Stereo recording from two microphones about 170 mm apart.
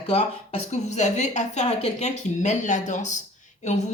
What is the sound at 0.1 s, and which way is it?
Speech, 35° left (ahead or behind).